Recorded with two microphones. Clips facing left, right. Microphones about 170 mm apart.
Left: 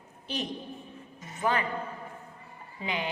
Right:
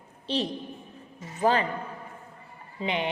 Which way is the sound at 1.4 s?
30° right (ahead or behind).